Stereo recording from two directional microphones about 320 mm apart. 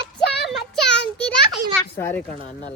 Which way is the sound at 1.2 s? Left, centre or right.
Centre.